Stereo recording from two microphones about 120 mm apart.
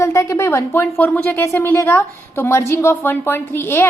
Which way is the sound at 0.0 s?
25° left (ahead or behind).